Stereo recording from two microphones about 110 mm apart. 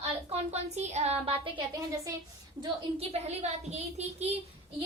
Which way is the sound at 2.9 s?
75° right (ahead or behind).